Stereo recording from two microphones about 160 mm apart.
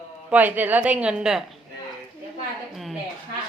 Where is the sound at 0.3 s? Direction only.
10° right (ahead or behind).